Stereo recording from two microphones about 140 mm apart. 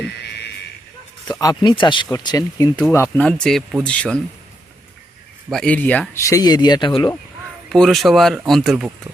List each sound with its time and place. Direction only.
1.3 s speech: 25° left (ahead or behind)
3.4 s a man's voice: centre (ahead or behind)
5.5 s speech: 5° left (ahead or behind)
6.2 s speech: 25° left (ahead or behind)
7.7 s a man's voice: centre (ahead or behind)